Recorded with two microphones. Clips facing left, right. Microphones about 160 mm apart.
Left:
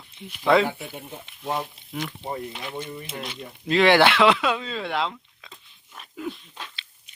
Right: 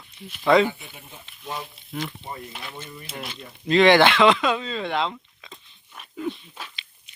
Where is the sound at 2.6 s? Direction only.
15° left (ahead or behind); by 6.9 s 10° right (ahead or behind).